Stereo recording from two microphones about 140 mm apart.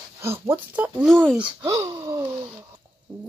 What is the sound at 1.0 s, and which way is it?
Speech, centre (ahead or behind).